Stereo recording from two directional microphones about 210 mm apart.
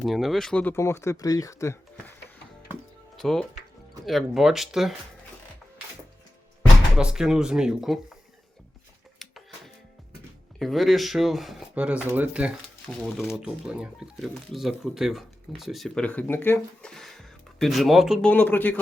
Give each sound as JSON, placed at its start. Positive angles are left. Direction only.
{"t": 0.0, "sound": "speech", "side_deg": 0}
{"t": 3.2, "sound": "speech", "side_deg": 0}
{"t": 6.9, "sound": "speech", "side_deg": -5}
{"t": 9.2, "sound": "music", "side_deg": 0}
{"t": 10.6, "sound": "speech", "side_deg": 0}